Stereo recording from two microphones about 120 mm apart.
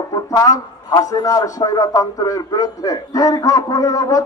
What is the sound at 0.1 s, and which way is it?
A man's voice, 30° left (ahead or behind).